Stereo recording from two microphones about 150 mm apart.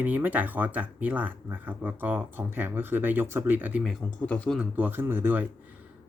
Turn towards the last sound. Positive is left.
turn(degrees=-15)  # may be behind; listen again after turning